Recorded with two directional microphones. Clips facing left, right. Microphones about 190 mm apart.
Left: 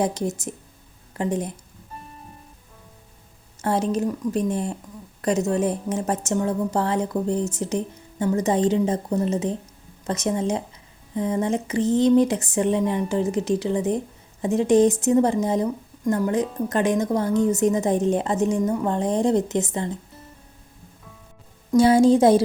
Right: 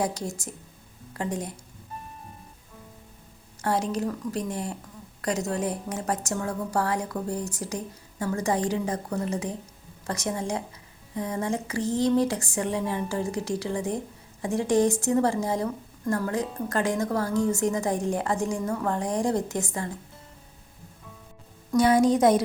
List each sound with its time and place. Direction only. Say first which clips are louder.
0.0 s speech: left 5 dB; 20° left (ahead or behind)
3.6 s speech: left 4 dB; 20° left (ahead or behind)
21.7 s speech: left 5 dB; 30° left (ahead or behind)